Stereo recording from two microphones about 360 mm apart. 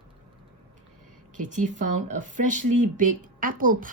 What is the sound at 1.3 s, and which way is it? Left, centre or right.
A woman's voice, right.